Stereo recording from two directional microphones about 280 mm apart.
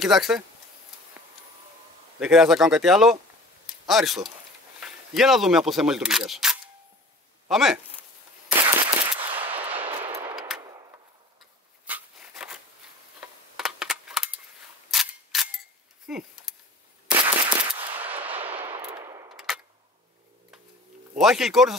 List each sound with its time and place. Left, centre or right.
0.0 s speech: centre
2.1 s speech: centre
8.7 s machine gun: centre
10.3 s gunshot: centre
10.6 s a sound: centre
14.9 s scissors: centre
16.1 s a sound: centre
17.2 s machine gun: centre
19.3 s a sound: centre
21.2 s speech: centre